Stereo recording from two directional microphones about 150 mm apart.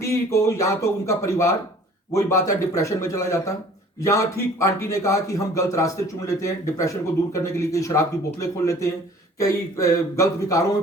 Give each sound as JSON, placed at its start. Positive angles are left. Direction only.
{"t": 0.0, "sound": "a man's voice", "side_deg": 20}